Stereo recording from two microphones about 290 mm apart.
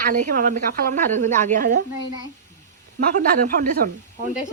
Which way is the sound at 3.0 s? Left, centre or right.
Right.